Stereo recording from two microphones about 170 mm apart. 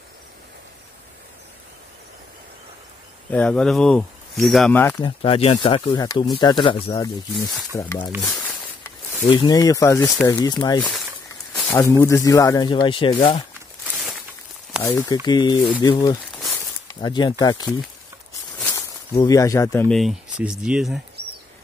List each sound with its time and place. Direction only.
3.3 s speech: 5° left (ahead or behind)
4.7 s speech: 15° left (ahead or behind)
5.0 s speech: 30° left (ahead or behind)
7.7 s speech: 15° left (ahead or behind)
8.2 s speech: 5° left (ahead or behind)
9.3 s speech: 25° left (ahead or behind)
10.8 s a sound: centre (ahead or behind)
11.5 s speech: 10° left (ahead or behind); by 13.4 s 30° left (ahead or behind)
13.8 s a sound: 5° right (ahead or behind)
14.8 s speech: 15° left (ahead or behind)
18.6 s snake: 20° left (ahead or behind)
19.9 s speech: centre (ahead or behind)